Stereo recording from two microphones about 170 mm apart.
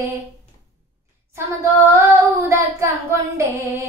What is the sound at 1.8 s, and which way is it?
Child singing, 15° right (ahead or behind).